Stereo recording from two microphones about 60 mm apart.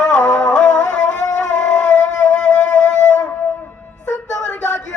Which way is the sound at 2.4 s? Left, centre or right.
Centre.